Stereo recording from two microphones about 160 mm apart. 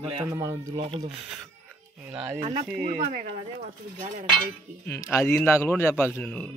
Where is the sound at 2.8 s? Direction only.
70° right (ahead or behind).